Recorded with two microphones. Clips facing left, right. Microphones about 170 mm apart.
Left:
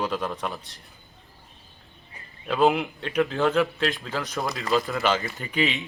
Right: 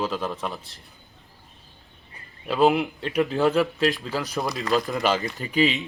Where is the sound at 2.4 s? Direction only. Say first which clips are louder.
Right 2 dB; 5° right (ahead or behind).